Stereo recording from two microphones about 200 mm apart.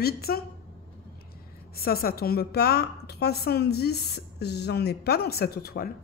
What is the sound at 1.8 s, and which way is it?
A woman's voice, 50° left (ahead or behind).